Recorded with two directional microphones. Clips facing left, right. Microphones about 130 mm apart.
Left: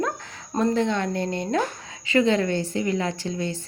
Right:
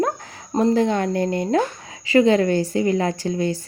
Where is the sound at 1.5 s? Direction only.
35° right (ahead or behind).